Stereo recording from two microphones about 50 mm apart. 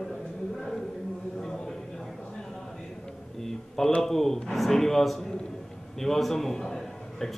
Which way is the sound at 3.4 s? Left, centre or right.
Centre.